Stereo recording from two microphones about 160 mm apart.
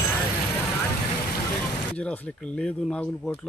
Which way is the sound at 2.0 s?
5° left (ahead or behind).